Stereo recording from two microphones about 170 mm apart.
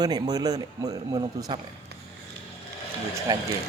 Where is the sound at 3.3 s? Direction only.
20° right (ahead or behind).